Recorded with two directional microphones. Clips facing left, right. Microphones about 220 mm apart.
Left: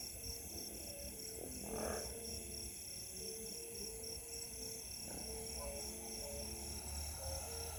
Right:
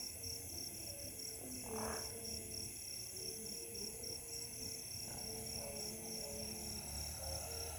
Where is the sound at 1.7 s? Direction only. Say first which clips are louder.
Left 2 dB; 35° left (ahead or behind).